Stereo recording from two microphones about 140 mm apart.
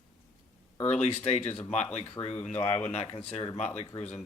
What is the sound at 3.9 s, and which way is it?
Speech, 25° left (ahead or behind).